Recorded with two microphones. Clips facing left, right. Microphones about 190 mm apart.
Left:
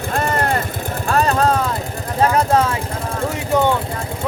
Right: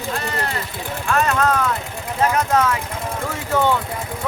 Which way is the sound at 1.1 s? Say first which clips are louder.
Left 2 dB; 35° left (ahead or behind).